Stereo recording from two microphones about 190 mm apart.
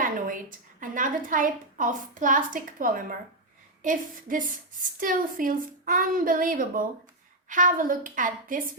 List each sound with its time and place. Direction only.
0.0 s a woman's voice: 45° right (ahead or behind)